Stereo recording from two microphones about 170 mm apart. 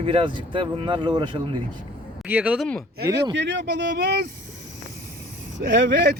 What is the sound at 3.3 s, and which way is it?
Speech, 90° right.